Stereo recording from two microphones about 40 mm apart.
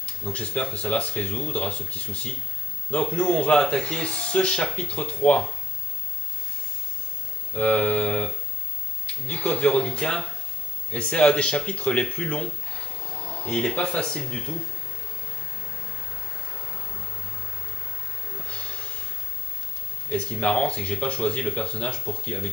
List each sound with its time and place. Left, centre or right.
0.0 s speech: left
7.5 s speech: left
13.5 s speech: centre
18.5 s a sound: left
20.3 s speech: left